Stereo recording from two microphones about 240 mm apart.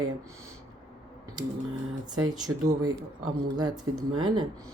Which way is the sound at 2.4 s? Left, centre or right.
Centre.